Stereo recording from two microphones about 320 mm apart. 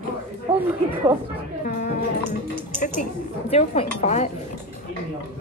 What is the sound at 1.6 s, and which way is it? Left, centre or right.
Speech, left.